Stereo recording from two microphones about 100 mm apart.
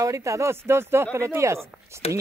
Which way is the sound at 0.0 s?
30° right (ahead or behind).